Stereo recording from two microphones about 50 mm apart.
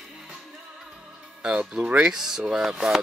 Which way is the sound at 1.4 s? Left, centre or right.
Centre.